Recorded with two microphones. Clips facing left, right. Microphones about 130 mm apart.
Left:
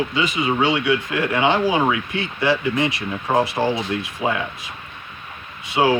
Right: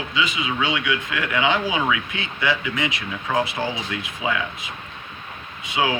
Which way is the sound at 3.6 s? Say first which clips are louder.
Left 6 dB; 60° left (ahead or behind).